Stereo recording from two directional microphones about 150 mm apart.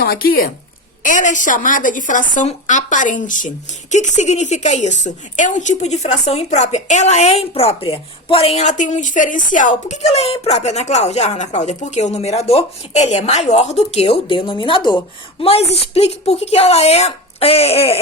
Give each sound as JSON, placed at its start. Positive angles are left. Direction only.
{"t": 0.0, "sound": "speech", "side_deg": 85}
{"t": 1.0, "sound": "a woman's voice", "side_deg": 55}